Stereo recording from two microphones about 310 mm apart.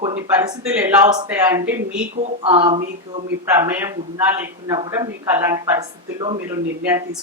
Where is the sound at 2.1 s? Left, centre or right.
Centre.